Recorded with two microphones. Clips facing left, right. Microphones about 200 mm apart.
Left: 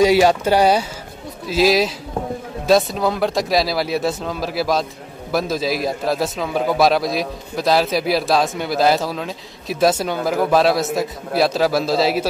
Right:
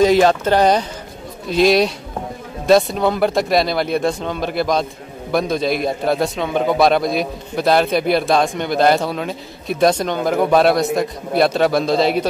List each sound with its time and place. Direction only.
0.0 s a man's voice: 10° left (ahead or behind)